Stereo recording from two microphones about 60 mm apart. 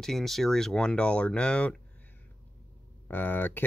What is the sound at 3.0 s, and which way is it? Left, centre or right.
Speech, left.